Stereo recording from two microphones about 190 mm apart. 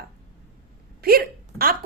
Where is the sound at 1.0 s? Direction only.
55° right (ahead or behind).